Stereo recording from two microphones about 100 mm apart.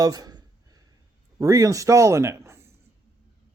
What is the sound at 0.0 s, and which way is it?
Speech, 40° right (ahead or behind).